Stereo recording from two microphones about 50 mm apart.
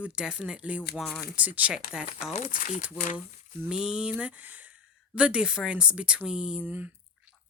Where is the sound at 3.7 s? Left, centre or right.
Centre.